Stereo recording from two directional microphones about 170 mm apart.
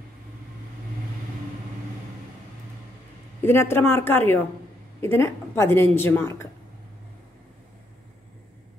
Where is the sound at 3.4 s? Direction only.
15° left (ahead or behind).